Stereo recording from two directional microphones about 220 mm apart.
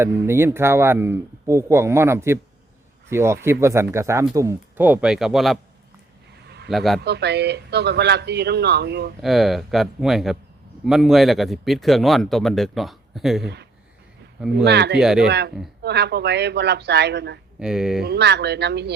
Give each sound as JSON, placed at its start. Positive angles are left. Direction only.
{"t": 0.0, "sound": "speech", "side_deg": -10}
{"t": 6.7, "sound": "speech", "side_deg": 0}
{"t": 7.0, "sound": "speech", "side_deg": -50}
{"t": 9.2, "sound": "speech", "side_deg": 0}
{"t": 14.6, "sound": "speech", "side_deg": -50}
{"t": 14.9, "sound": "speech", "side_deg": -5}
{"t": 15.3, "sound": "speech", "side_deg": -50}
{"t": 17.6, "sound": "speech", "side_deg": -5}
{"t": 18.0, "sound": "speech", "side_deg": -50}